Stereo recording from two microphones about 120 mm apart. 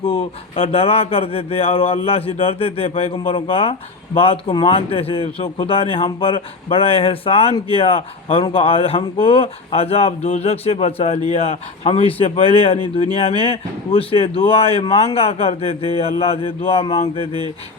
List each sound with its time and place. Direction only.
0.5 s speech: 55° left (ahead or behind)